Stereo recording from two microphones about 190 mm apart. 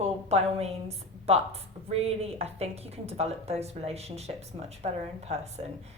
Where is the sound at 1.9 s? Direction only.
30° right (ahead or behind).